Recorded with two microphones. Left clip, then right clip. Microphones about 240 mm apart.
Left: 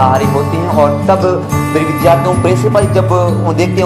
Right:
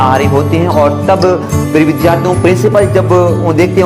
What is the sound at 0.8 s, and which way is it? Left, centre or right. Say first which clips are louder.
Music: even; right.